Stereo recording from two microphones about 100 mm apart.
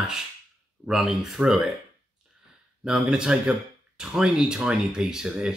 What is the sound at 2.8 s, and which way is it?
Speech, 5° right (ahead or behind).